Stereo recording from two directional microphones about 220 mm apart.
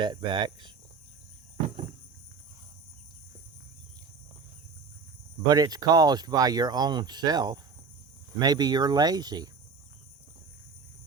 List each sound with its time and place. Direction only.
0.0 s speech: 20° right (ahead or behind)
5.5 s speech: 20° right (ahead or behind)